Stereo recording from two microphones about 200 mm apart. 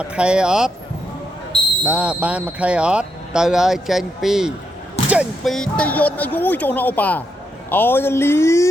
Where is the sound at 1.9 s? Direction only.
5° right (ahead or behind).